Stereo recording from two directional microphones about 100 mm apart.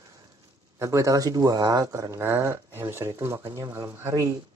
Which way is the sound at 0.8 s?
30° right (ahead or behind).